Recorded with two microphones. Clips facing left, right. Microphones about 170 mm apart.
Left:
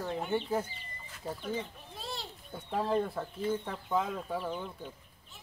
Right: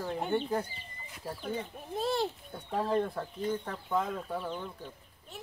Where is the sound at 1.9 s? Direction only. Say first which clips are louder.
Right 14 dB; 55° right (ahead or behind).